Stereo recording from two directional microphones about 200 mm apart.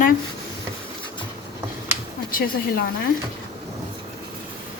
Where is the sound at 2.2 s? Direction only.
45° left (ahead or behind).